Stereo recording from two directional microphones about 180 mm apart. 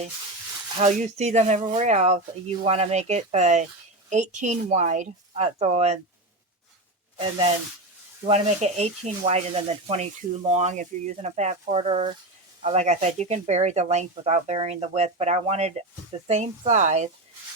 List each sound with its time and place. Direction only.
0.8 s speech: 40° right (ahead or behind)
7.2 s speech: 30° right (ahead or behind)